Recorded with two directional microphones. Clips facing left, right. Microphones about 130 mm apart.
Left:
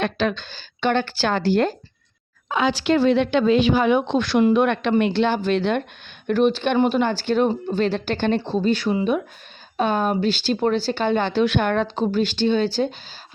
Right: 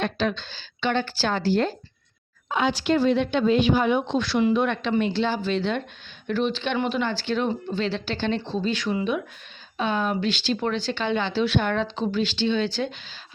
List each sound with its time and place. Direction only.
0.0 s a woman's voice: 65° left (ahead or behind)
2.5 s speech: 90° left; by 5.8 s 60° left (ahead or behind)
6.2 s speech: 50° left (ahead or behind)